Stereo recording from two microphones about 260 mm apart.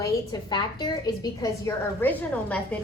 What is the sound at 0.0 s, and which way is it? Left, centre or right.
A woman's voice, centre.